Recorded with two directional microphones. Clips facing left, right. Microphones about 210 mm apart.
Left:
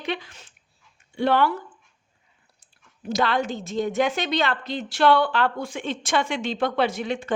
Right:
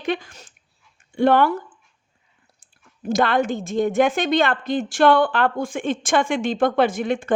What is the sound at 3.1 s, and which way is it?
A woman's voice, 50° right (ahead or behind).